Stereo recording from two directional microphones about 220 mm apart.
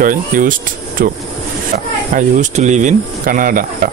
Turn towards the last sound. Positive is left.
turn(degrees=-40)  # may be behind; listen again after turning